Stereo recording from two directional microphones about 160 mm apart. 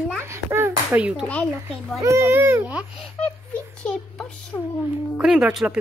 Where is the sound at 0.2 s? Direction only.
15° right (ahead or behind).